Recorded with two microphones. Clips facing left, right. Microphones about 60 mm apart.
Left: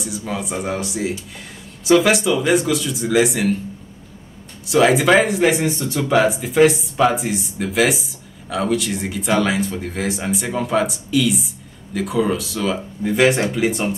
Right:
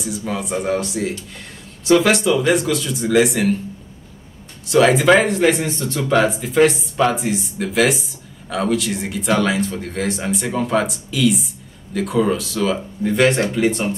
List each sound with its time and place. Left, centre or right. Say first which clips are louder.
0.0 s speech: right 1 dB; centre
4.6 s speech: right 1 dB; centre